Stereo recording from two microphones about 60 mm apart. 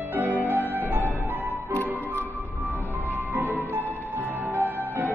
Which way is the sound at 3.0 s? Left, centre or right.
Right.